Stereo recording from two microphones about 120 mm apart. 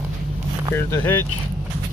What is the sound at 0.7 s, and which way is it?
Speech, 20° left (ahead or behind).